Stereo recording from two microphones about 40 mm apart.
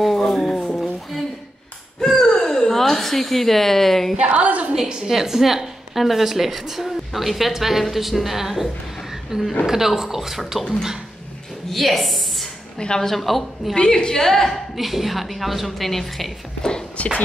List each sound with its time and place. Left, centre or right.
0.0 s a sound: centre
2.0 s a sound: centre
4.2 s a woman's voice: right
5.1 s a woman's voice: centre
11.7 s a woman's voice: centre
12.7 s a woman's voice: centre
13.1 s a woman's voice: centre
13.7 s a woman's voice: left
14.8 s a woman's voice: centre
16.9 s speech: left